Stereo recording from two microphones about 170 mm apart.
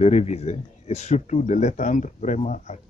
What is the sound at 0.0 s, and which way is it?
Speech, 40° left (ahead or behind).